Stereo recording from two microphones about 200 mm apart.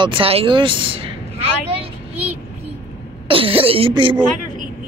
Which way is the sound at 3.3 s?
25° right (ahead or behind).